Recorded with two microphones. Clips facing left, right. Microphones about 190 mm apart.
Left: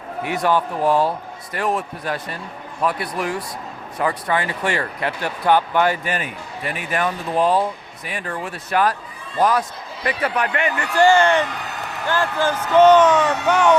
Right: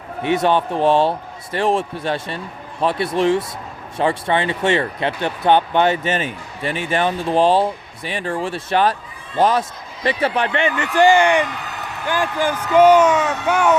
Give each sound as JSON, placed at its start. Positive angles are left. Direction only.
{"t": 0.2, "sound": "speech", "side_deg": -25}